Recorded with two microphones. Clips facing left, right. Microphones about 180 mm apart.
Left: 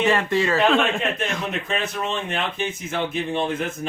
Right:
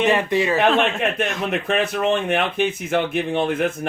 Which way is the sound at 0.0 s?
20° right (ahead or behind).